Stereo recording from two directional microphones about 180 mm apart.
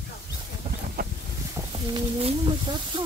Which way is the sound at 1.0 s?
55° right (ahead or behind).